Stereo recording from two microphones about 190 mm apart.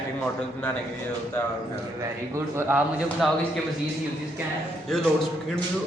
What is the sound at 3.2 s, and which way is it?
Speech, centre (ahead or behind).